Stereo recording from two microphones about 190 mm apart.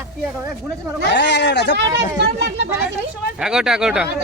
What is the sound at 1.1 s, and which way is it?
Speech, 65° left (ahead or behind).